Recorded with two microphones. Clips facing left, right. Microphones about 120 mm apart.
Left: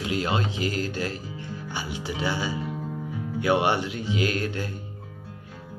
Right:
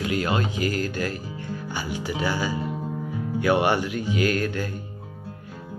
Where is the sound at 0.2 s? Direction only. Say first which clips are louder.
Right 2 dB; 25° left (ahead or behind).